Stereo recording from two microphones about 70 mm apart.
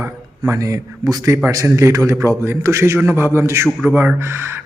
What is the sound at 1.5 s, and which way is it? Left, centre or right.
A man's voice, right.